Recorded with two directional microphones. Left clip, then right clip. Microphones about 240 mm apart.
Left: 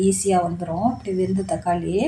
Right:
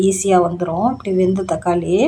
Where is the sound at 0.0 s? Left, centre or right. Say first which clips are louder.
Right 5 dB; centre.